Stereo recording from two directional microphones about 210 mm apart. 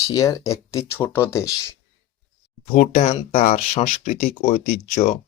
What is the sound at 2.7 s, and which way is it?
Speech, 35° left (ahead or behind).